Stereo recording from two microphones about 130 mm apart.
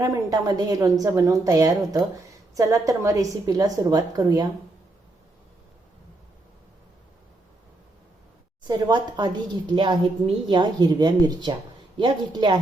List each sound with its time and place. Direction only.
0.0 s a woman's voice: 25° right (ahead or behind)
8.6 s a woman's voice: 35° right (ahead or behind)